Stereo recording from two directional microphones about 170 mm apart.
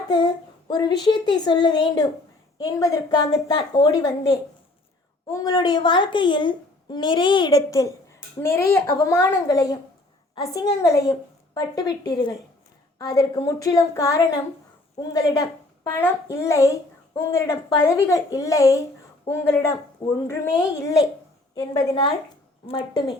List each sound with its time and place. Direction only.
0.7 s a woman's voice: 25° left (ahead or behind)